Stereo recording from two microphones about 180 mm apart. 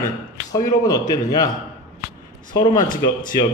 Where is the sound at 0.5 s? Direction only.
20° left (ahead or behind).